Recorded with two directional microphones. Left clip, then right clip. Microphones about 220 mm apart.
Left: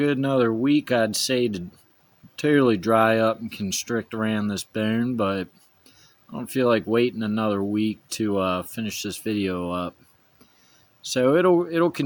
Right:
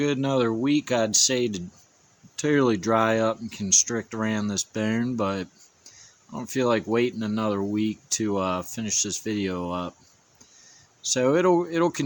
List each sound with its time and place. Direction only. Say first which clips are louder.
0.0 s speech: left 2 dB; 5° left (ahead or behind)
11.0 s speech: left 2 dB; 10° left (ahead or behind)